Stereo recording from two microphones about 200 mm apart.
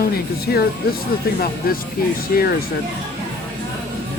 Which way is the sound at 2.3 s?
45° left (ahead or behind).